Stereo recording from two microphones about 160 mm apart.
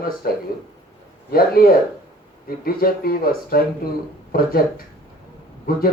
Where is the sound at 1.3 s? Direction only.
70° left (ahead or behind).